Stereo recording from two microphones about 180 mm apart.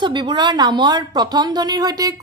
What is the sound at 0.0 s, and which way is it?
A woman's voice, 25° right (ahead or behind).